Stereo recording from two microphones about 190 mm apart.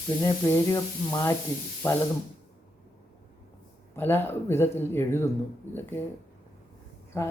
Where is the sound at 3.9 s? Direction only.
10° left (ahead or behind).